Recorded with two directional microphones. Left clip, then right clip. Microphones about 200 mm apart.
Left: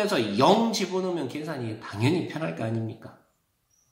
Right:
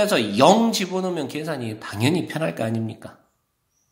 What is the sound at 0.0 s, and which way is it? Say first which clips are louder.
Speech: right 6 dB; 40° right (ahead or behind).